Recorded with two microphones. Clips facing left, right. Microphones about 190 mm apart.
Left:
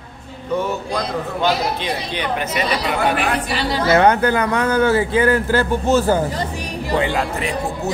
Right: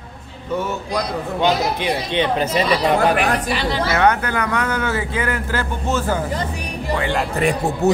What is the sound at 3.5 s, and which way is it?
Speech, 35° left (ahead or behind).